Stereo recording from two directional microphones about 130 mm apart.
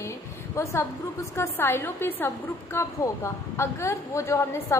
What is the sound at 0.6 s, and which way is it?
A woman's voice, 25° left (ahead or behind).